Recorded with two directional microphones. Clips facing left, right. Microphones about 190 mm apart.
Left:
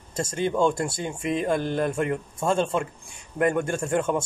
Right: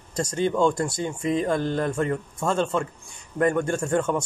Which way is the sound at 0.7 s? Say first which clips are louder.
Right 1 dB; 25° left (ahead or behind).